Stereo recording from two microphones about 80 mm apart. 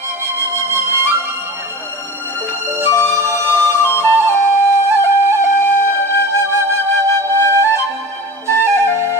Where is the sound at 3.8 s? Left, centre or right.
Left.